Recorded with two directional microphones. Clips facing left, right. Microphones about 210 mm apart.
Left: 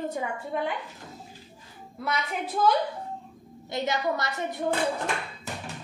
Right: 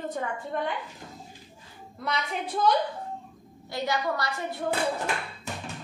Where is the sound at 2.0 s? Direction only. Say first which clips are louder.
Left 1 dB; 5° left (ahead or behind).